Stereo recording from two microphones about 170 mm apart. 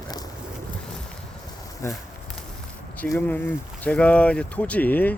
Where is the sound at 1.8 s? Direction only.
15° left (ahead or behind).